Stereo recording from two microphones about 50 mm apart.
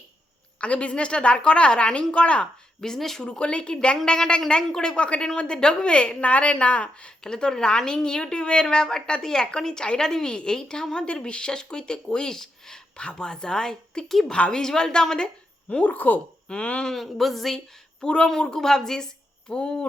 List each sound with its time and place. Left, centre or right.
0.6 s a woman's voice: left
2.8 s a woman's voice: centre
3.2 s a woman's voice: left
14.3 s a woman's voice: left
14.6 s a woman's voice: centre
15.7 s speech: left
16.5 s a woman's voice: left
16.8 s speech: centre
18.0 s a woman's voice: left
18.5 s a woman's voice: centre